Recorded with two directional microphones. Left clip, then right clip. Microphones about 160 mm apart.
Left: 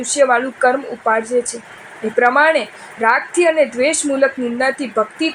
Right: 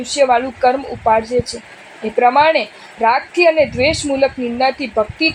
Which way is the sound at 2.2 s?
20° left (ahead or behind).